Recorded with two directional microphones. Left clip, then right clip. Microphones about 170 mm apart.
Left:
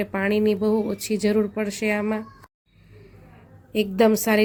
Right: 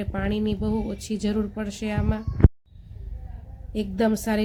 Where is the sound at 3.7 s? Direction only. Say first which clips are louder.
Left 6 dB; 15° left (ahead or behind).